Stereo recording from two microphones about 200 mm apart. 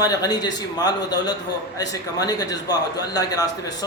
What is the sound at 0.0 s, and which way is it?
A man's voice, 20° left (ahead or behind).